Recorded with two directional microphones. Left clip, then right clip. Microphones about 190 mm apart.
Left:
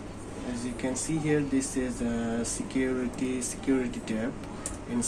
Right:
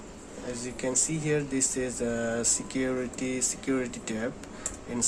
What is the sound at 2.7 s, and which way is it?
Speech, 50° right (ahead or behind).